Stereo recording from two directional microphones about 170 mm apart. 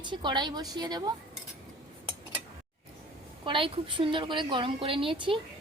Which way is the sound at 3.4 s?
30° right (ahead or behind).